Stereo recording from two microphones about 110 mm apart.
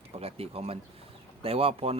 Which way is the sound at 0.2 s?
60° right (ahead or behind).